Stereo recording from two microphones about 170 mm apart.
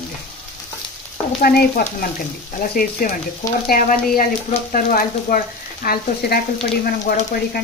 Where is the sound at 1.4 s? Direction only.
65° left (ahead or behind).